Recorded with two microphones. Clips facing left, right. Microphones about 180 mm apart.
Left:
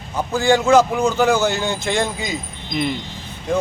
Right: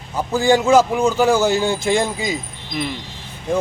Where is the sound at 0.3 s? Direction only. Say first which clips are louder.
Even; 15° right (ahead or behind).